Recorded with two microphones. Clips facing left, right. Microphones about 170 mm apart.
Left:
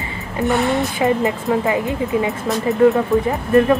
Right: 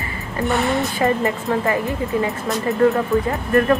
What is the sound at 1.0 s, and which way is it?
Speech, 15° left (ahead or behind).